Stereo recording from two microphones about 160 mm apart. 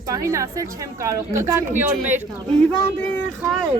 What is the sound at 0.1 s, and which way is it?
Speech, 20° right (ahead or behind).